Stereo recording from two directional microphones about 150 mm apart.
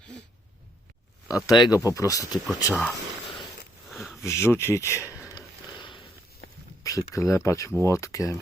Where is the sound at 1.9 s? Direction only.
20° left (ahead or behind).